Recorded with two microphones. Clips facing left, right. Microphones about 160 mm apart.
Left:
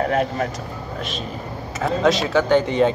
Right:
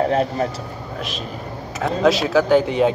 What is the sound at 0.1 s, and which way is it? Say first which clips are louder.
Speech: right 2 dB; 30° right (ahead or behind).